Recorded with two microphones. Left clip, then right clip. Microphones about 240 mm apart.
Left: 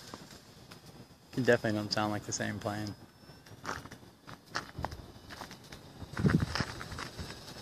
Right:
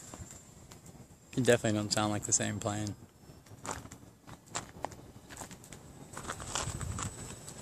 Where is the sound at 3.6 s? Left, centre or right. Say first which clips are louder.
Left 2 dB; right.